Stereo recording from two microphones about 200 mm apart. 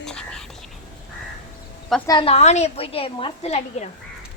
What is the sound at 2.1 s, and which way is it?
A woman's voice, 25° left (ahead or behind).